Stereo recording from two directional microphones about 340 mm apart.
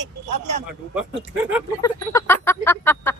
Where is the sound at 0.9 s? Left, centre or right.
Centre.